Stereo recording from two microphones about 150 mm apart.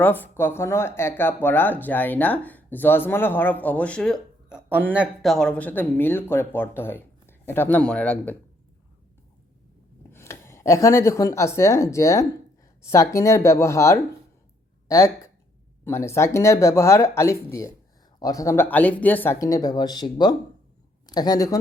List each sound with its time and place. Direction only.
0.0 s speech: 15° left (ahead or behind)
4.4 s speech: 10° right (ahead or behind)
5.2 s speech: 5° left (ahead or behind)
10.1 s speech: 15° left (ahead or behind)